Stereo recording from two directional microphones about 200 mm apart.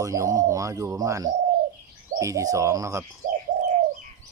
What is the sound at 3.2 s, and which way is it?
Bird, 40° right (ahead or behind).